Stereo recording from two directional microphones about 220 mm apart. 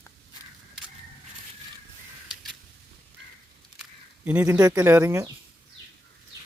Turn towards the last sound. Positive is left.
turn(degrees=-15)  # may be behind; listen again after turning